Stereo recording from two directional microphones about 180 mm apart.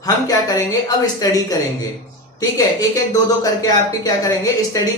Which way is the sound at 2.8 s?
20° left (ahead or behind).